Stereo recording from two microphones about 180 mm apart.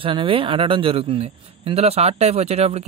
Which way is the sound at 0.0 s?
30° right (ahead or behind).